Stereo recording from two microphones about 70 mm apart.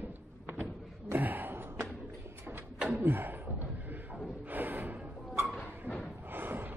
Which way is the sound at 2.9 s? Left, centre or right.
Right.